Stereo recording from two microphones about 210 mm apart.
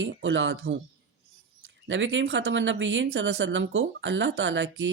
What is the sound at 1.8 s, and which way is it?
Speech, 65° right (ahead or behind).